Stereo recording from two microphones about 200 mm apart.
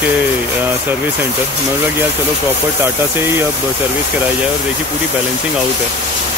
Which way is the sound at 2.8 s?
10° right (ahead or behind).